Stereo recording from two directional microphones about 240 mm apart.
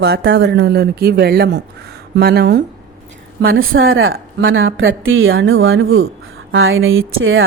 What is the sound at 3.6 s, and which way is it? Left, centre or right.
A woman's voice, right.